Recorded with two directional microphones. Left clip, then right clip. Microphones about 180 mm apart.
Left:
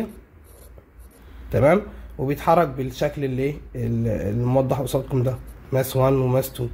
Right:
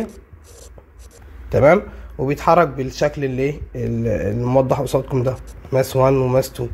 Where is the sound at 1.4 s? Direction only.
15° right (ahead or behind).